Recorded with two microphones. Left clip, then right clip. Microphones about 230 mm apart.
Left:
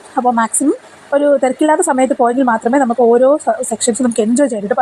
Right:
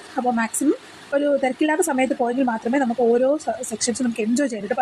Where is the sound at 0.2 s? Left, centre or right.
Centre.